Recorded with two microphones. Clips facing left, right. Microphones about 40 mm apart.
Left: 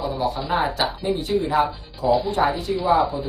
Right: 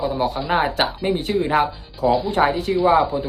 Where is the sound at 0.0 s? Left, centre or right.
Right.